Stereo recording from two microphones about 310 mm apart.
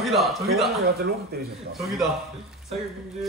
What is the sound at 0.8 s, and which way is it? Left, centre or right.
Speech, right.